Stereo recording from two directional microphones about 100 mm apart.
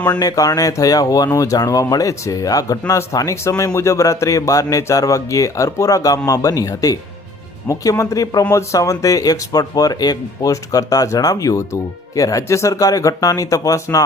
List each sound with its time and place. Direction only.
0.1 s speech: 40° left (ahead or behind)